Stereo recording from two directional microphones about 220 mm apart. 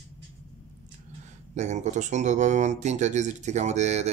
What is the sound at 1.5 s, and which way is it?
Speech, 30° right (ahead or behind).